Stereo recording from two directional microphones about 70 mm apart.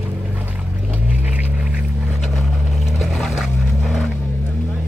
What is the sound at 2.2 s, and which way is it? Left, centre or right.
Vehicle, centre.